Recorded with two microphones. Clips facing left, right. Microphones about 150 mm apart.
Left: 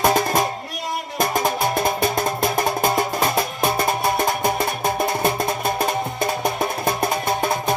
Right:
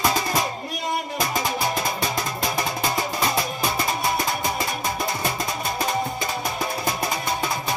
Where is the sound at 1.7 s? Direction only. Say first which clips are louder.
Left 5 dB; 55° left (ahead or behind).